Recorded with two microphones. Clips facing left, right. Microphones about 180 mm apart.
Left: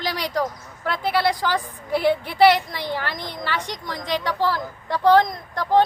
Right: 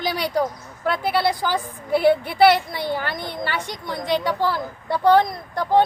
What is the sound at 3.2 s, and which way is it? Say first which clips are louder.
Speech: right 3 dB; 55° right (ahead or behind).